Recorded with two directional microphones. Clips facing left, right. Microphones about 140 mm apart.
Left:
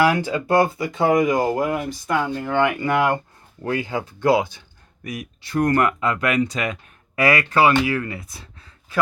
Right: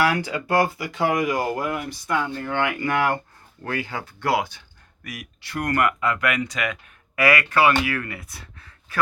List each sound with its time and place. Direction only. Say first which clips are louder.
0.0 s speech: left 4 dB; 20° left (ahead or behind)